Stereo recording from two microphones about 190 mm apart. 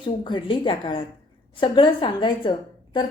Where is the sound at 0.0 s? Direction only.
25° left (ahead or behind).